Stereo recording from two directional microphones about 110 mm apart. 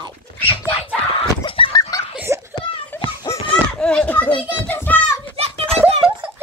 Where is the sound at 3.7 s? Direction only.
10° left (ahead or behind).